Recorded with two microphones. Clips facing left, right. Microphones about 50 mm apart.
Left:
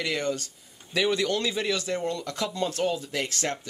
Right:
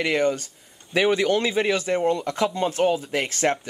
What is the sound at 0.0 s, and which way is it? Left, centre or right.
Speech, right.